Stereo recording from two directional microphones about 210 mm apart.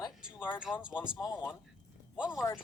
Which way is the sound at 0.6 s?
5° right (ahead or behind).